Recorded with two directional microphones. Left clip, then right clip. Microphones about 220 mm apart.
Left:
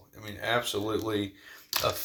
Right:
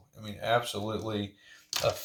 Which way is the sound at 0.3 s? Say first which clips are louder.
Even; 15° left (ahead or behind).